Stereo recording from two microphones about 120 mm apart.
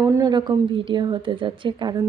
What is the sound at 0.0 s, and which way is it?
A woman's voice, 30° right (ahead or behind).